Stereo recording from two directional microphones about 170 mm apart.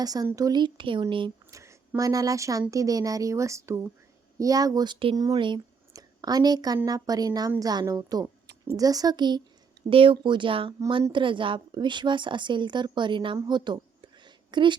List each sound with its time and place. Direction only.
0.0 s a woman's voice: 20° right (ahead or behind)
1.5 s a woman's voice: 15° right (ahead or behind)